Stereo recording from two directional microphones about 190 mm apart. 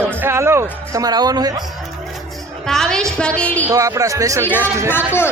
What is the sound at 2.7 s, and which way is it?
A woman's voice, 5° left (ahead or behind).